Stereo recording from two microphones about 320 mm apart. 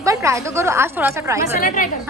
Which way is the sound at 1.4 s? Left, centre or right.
Left.